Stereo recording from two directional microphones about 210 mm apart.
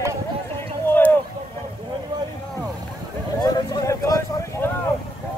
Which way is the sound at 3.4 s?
20° left (ahead or behind).